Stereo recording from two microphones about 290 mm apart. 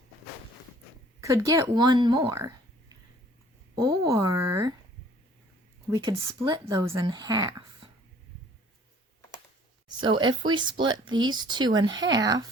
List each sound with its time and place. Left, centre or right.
1.2 s speech: centre
3.8 s speech: centre
5.9 s speech: centre
10.0 s speech: centre